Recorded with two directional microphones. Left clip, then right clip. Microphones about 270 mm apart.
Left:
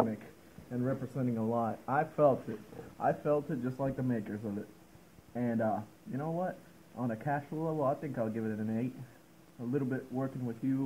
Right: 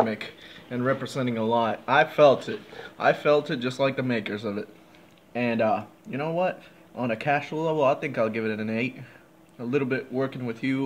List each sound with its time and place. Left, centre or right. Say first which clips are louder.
0.7 s speech: right 10 dB; right